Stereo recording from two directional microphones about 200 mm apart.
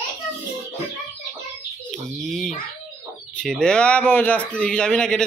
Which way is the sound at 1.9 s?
Centre (ahead or behind).